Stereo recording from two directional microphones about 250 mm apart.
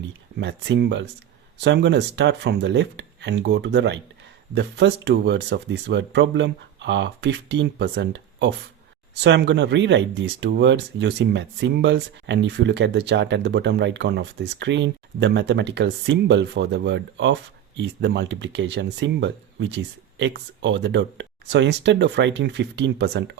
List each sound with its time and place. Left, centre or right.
0.0 s speech: right